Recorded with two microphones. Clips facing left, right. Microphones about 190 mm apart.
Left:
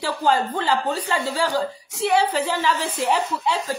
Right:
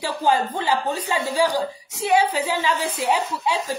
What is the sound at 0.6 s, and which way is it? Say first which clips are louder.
Speech: left 1 dB; 10° right (ahead or behind).